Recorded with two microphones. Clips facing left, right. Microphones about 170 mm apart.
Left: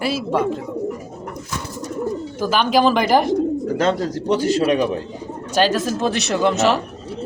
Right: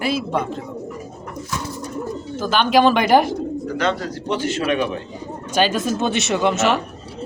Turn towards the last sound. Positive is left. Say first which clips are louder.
# left 1 dB
turn(degrees=0)  # may be behind; listen again after turning